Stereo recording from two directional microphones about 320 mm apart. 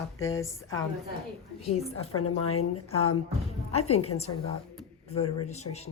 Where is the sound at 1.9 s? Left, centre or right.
Left.